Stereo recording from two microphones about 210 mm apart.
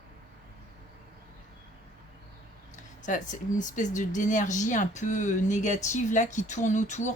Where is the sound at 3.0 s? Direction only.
35° left (ahead or behind).